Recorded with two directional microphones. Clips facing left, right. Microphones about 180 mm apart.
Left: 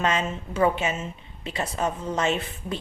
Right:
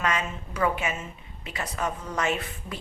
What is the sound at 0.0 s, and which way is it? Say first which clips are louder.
A woman's voice: left 3 dB; 25° left (ahead or behind).